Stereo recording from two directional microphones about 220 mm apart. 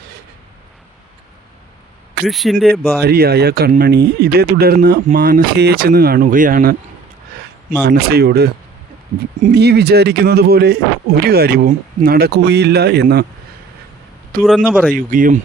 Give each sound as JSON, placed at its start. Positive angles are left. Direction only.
{"t": 2.2, "sound": "speech", "side_deg": 0}
{"t": 3.0, "sound": "speech", "side_deg": -45}
{"t": 7.8, "sound": "speech", "side_deg": -45}
{"t": 14.4, "sound": "speech", "side_deg": 0}
{"t": 14.9, "sound": "speech", "side_deg": -40}